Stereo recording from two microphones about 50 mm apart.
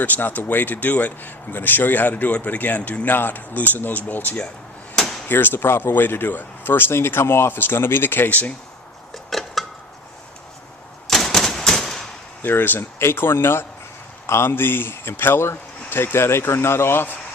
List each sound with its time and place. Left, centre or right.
0.0 s speech: left
4.9 s a sound: centre
5.3 s speech: left
9.1 s a sound: centre
11.1 s typewriter: centre
12.4 s speech: left